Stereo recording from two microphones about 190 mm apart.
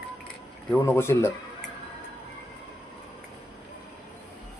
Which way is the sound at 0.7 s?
10° left (ahead or behind).